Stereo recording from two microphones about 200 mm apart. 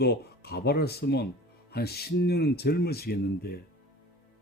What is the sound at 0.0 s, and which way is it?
Speech, 55° left (ahead or behind).